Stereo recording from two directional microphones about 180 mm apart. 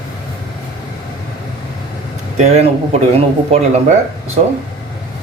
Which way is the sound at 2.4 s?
40° right (ahead or behind).